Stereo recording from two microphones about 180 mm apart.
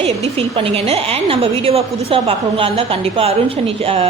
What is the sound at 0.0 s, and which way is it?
A woman's voice, 35° right (ahead or behind).